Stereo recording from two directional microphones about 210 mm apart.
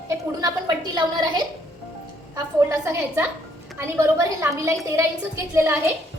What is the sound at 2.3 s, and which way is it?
A woman's voice, 15° right (ahead or behind).